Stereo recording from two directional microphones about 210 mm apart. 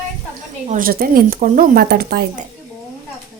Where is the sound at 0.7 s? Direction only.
40° right (ahead or behind).